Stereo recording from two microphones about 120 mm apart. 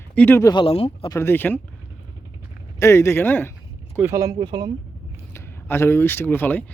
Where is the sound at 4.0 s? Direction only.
25° right (ahead or behind).